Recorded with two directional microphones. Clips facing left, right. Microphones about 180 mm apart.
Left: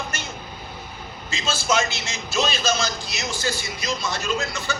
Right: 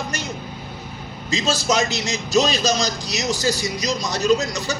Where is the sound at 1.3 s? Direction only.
40° right (ahead or behind).